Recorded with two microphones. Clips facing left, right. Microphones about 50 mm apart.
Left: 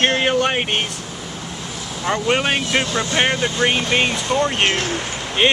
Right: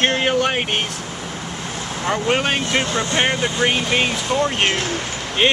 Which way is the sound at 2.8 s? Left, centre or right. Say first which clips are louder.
Even; right.